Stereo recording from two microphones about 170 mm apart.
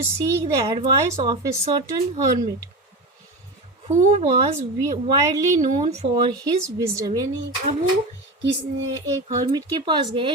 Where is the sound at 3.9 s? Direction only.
40° right (ahead or behind).